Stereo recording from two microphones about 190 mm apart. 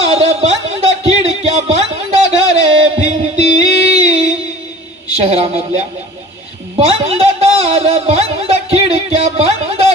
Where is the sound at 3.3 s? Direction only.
35° right (ahead or behind).